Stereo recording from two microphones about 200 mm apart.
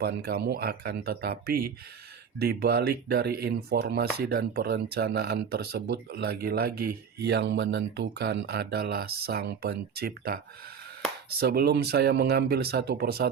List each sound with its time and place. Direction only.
0.0 s speech: 55° right (ahead or behind)